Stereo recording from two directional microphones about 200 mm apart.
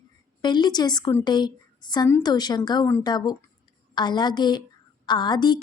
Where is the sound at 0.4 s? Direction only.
20° left (ahead or behind).